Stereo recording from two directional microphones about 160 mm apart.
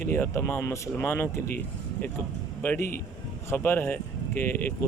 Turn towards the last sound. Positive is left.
turn(degrees=15)  # may be behind; listen again after turning